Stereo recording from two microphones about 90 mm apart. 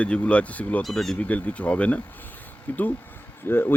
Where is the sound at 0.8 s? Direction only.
5° left (ahead or behind).